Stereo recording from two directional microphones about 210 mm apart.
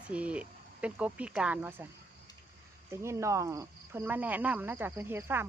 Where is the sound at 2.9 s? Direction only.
15° right (ahead or behind).